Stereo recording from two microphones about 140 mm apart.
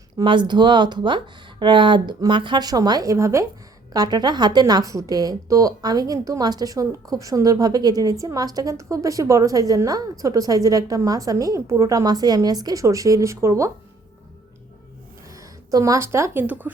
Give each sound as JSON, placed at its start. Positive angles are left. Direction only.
{"t": 0.2, "sound": "a woman's voice", "side_deg": -35}
{"t": 15.3, "sound": "speech", "side_deg": -25}